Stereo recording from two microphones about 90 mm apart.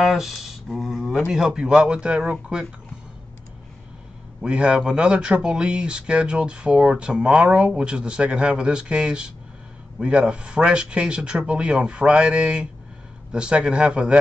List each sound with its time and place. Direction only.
0.0 s a sound: centre (ahead or behind)
1.3 s speech: 5° right (ahead or behind)
4.4 s speech: 10° right (ahead or behind)